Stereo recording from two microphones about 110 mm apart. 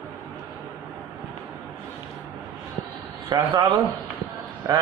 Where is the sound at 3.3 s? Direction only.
40° right (ahead or behind).